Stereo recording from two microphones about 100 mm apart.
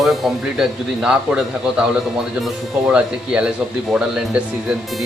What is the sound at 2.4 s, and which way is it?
Speech, 10° right (ahead or behind).